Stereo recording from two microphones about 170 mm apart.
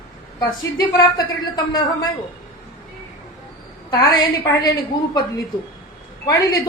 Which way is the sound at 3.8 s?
25° left (ahead or behind).